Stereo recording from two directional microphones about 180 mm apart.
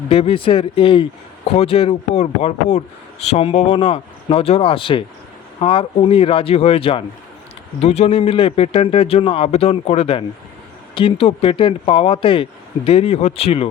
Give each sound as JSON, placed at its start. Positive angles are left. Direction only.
{"t": 0.1, "sound": "speech", "side_deg": 30}